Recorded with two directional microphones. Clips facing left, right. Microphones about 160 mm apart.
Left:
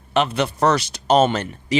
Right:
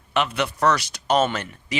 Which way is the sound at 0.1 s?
30° left (ahead or behind).